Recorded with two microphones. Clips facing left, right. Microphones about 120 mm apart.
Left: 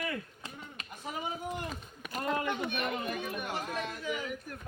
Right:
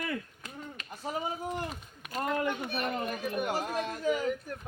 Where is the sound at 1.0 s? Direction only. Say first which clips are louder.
Right 3 dB; 35° right (ahead or behind).